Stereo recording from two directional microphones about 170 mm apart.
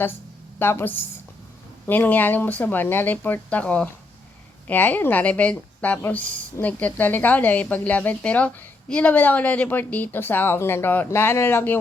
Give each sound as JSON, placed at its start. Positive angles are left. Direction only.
{"t": 0.6, "sound": "a woman's voice", "side_deg": 15}